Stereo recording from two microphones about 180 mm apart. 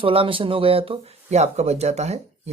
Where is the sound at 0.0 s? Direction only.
30° right (ahead or behind).